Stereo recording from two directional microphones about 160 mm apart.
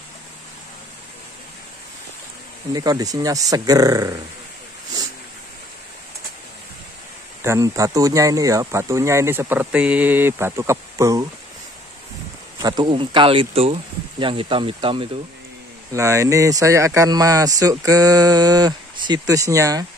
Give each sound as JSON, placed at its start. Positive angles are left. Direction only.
{"t": 2.7, "sound": "speech", "side_deg": -25}
{"t": 7.4, "sound": "speech", "side_deg": -20}
{"t": 12.6, "sound": "speech", "side_deg": -25}
{"t": 15.9, "sound": "speech", "side_deg": -20}